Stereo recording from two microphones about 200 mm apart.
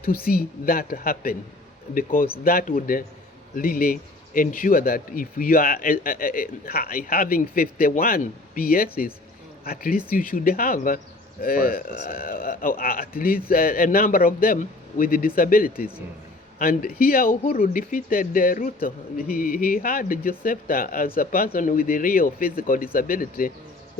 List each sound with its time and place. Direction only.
0.0 s speech: 50° left (ahead or behind)